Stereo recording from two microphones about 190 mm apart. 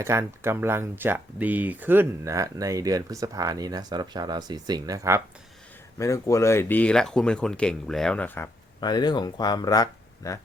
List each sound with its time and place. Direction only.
0.0 s speech: 15° right (ahead or behind)
6.0 s speech: 15° left (ahead or behind)
8.8 s speech: 20° left (ahead or behind)